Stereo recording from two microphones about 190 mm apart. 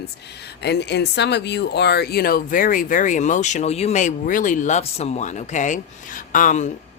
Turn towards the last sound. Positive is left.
turn(degrees=40)  # may be behind; listen again after turning